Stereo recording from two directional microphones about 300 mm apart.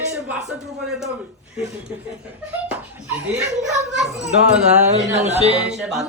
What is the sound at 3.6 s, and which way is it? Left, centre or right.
A woman's voice, centre.